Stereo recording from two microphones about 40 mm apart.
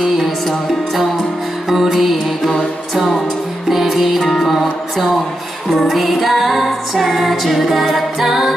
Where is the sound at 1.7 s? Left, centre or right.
Centre.